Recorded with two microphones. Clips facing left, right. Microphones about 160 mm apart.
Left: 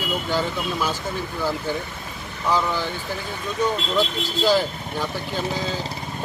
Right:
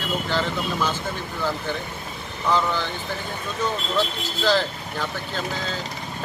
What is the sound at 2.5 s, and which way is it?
Speech, 10° left (ahead or behind).